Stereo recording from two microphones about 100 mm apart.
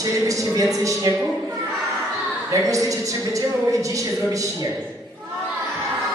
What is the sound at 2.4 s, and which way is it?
A woman's voice, 35° right (ahead or behind).